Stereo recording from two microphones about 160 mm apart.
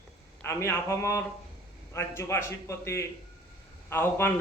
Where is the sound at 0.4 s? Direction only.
15° left (ahead or behind).